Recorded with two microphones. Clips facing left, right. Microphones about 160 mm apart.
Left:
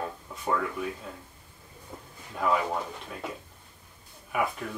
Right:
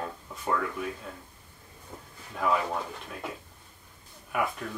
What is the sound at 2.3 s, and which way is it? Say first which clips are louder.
Speech: left 1 dB; 5° left (ahead or behind).